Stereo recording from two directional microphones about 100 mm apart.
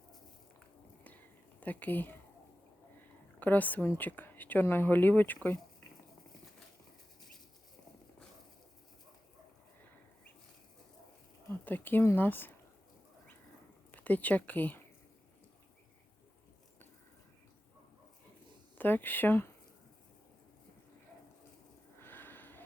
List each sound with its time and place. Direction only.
1.6 s speech: 15° left (ahead or behind)
3.4 s speech: 15° left (ahead or behind)
11.6 s speech: 20° left (ahead or behind)
13.9 s speech: 15° left (ahead or behind)
18.8 s speech: 20° left (ahead or behind)
21.9 s a sound: 20° left (ahead or behind)